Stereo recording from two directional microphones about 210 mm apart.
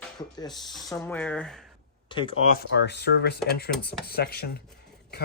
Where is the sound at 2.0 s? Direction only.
25° left (ahead or behind).